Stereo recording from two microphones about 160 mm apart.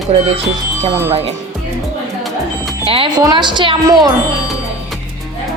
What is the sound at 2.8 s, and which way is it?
Speech, 35° right (ahead or behind).